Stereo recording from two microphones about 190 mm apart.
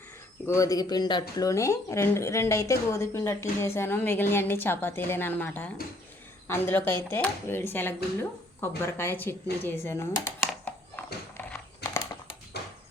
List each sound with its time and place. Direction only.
0.4 s a man's voice: 15° left (ahead or behind)